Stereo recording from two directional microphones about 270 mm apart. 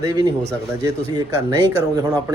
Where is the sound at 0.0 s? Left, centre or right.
Centre.